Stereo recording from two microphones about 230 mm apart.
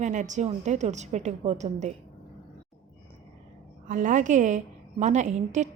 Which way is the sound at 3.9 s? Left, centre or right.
Right.